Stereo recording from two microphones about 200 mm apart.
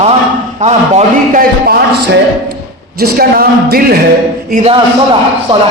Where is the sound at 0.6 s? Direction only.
40° right (ahead or behind).